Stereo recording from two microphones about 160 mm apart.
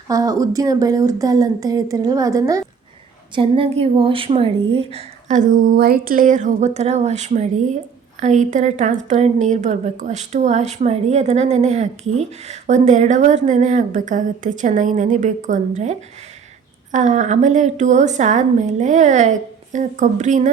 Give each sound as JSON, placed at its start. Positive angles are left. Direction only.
{"t": 0.1, "sound": "speech", "side_deg": -20}
{"t": 3.3, "sound": "a woman's voice", "side_deg": -35}